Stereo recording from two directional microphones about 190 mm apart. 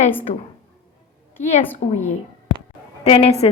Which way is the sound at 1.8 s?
35° left (ahead or behind).